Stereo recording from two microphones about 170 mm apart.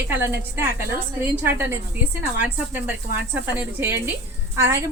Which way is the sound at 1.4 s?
10° right (ahead or behind).